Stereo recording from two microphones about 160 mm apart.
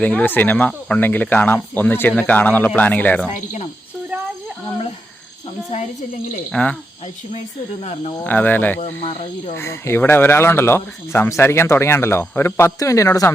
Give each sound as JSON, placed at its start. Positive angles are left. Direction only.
{"t": 0.0, "sound": "speech", "side_deg": 10}
{"t": 6.5, "sound": "speech", "side_deg": 5}
{"t": 7.3, "sound": "speech", "side_deg": 40}
{"t": 8.2, "sound": "speech", "side_deg": 10}